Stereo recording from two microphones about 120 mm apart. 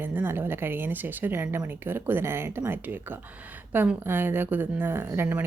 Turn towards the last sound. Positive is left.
turn(degrees=-20)  # may be behind; listen again after turning